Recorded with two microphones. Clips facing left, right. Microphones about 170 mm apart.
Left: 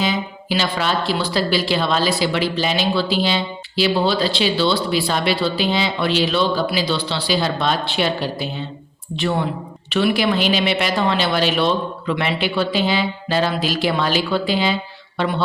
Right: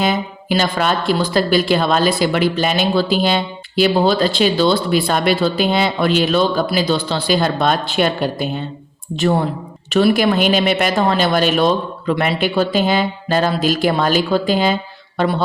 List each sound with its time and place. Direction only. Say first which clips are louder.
0.0 s speech: right 3 dB; 55° right (ahead or behind)